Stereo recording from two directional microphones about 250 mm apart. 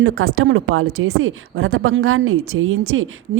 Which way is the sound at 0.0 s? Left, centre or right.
Right.